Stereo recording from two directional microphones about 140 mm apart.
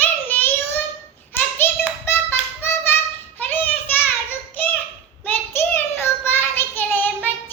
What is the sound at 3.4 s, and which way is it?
Child singing, 15° left (ahead or behind).